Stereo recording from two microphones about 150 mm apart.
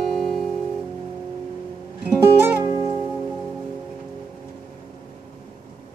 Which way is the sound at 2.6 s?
25° right (ahead or behind).